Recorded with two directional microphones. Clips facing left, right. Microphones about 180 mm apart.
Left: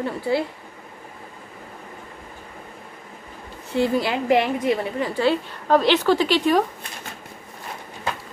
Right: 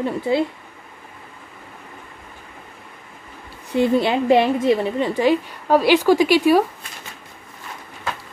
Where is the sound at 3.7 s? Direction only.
20° right (ahead or behind).